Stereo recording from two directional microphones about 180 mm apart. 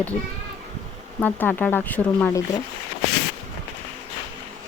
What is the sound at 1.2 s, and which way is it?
A woman's voice, 10° left (ahead or behind).